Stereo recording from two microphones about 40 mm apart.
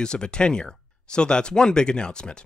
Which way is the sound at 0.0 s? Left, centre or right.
Left.